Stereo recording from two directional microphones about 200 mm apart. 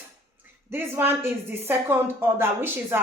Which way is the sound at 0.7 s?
10° right (ahead or behind).